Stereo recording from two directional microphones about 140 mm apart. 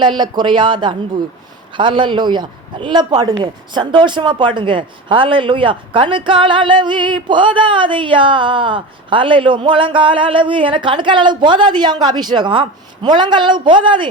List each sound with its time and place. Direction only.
0.0 s speech: 30° right (ahead or behind)